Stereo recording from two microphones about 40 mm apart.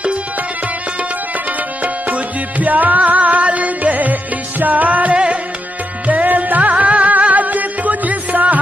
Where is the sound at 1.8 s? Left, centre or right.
Right.